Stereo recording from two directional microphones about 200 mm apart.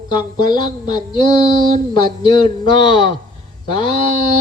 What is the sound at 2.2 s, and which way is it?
Speech, 25° left (ahead or behind).